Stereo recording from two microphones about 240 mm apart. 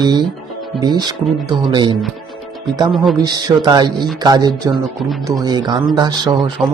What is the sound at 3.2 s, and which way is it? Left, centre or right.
Speech, centre.